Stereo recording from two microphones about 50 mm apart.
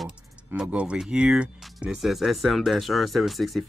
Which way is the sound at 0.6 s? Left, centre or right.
Right.